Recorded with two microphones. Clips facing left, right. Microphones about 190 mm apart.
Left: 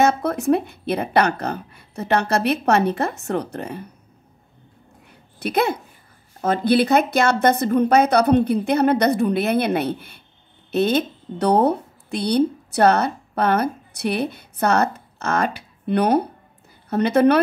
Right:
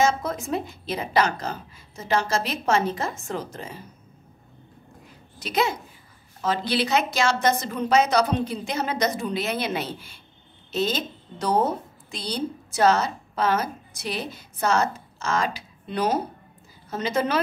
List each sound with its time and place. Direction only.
0.0 s speech: 65° left (ahead or behind)
5.4 s a woman's voice: 60° left (ahead or behind)